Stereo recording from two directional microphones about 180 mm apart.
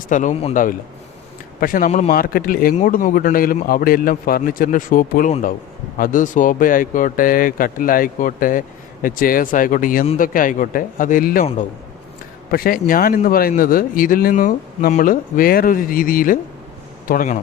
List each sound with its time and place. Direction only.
0.1 s speech: 45° left (ahead or behind)
12.5 s speech: 55° left (ahead or behind)